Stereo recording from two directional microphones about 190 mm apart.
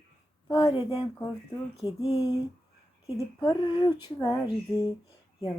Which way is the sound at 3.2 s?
20° left (ahead or behind).